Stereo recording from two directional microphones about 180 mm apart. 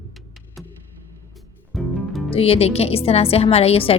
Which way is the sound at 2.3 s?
35° left (ahead or behind).